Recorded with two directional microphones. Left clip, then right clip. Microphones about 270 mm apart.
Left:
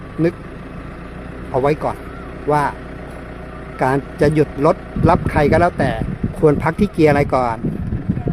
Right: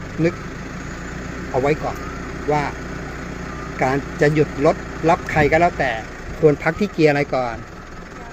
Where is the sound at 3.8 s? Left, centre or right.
Centre.